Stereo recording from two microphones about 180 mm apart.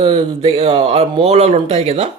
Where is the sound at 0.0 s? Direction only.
30° right (ahead or behind).